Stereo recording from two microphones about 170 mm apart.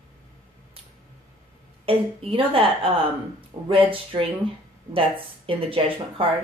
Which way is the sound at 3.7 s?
30° right (ahead or behind).